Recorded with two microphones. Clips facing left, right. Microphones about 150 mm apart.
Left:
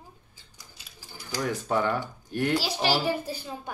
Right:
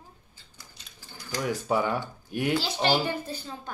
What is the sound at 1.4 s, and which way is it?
Speech, 10° right (ahead or behind).